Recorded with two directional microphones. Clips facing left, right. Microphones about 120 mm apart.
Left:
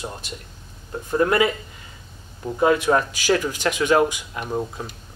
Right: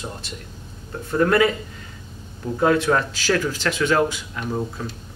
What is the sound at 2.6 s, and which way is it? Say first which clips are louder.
Speech: even; 10° left (ahead or behind).